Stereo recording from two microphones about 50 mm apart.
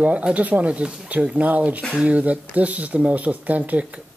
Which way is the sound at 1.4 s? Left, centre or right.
Right.